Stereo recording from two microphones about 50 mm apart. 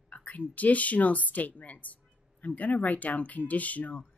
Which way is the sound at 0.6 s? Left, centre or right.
Left.